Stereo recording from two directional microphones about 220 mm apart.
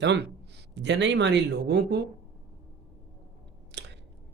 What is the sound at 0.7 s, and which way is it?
Speech, 55° right (ahead or behind).